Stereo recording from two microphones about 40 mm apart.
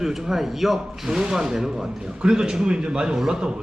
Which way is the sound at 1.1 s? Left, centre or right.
Centre.